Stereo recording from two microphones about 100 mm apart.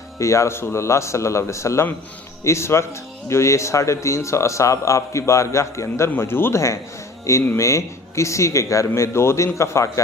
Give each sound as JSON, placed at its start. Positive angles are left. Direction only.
{"t": 0.2, "sound": "speech", "side_deg": 30}